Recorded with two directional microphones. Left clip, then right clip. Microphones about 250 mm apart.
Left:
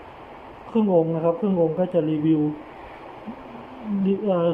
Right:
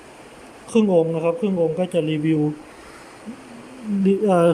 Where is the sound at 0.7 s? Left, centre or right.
Centre.